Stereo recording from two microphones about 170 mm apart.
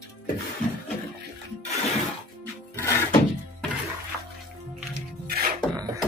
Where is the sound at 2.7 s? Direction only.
10° left (ahead or behind).